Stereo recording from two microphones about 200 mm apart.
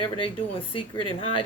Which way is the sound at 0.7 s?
25° left (ahead or behind).